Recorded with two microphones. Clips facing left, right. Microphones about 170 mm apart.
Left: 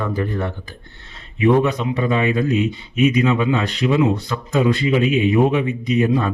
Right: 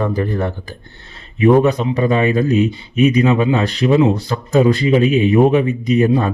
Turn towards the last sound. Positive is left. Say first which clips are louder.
# right 4 dB
turn(degrees=-35)  # may be behind; listen again after turning